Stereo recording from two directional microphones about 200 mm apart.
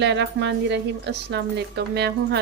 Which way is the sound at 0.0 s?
60° right (ahead or behind).